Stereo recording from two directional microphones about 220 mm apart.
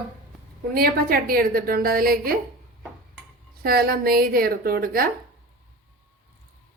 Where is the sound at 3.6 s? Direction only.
45° right (ahead or behind).